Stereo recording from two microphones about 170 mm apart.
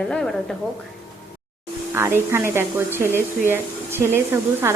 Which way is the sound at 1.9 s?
15° right (ahead or behind).